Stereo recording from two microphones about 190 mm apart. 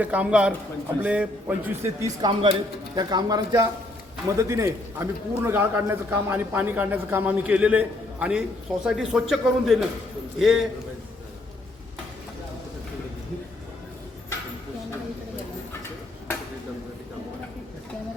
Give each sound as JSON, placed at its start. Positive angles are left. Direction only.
{"t": 0.0, "sound": "a man's voice", "side_deg": -5}